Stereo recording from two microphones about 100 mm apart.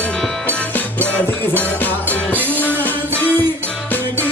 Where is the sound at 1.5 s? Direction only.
15° left (ahead or behind).